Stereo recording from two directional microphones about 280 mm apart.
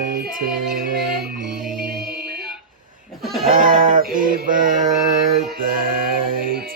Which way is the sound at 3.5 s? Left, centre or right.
Right.